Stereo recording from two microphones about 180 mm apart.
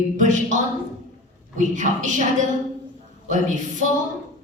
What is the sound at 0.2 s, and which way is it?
A woman's voice, 45° right (ahead or behind).